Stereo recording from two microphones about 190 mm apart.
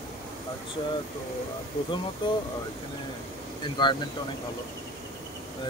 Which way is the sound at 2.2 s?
25° left (ahead or behind).